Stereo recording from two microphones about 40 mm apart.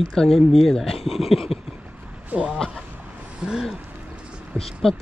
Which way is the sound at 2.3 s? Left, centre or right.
Right.